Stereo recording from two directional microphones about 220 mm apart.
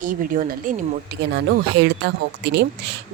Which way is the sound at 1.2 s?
50° right (ahead or behind).